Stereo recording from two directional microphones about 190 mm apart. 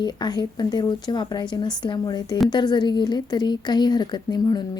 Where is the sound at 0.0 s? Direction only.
25° left (ahead or behind).